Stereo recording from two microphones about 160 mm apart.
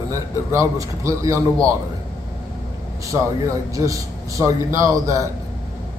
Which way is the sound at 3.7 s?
20° right (ahead or behind).